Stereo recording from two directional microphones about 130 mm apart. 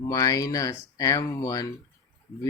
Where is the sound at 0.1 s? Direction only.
25° left (ahead or behind).